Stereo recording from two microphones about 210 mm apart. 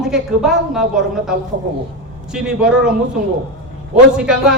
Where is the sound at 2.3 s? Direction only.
5° right (ahead or behind).